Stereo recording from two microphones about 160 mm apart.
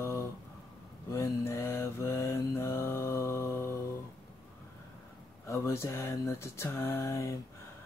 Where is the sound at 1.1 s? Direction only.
15° left (ahead or behind).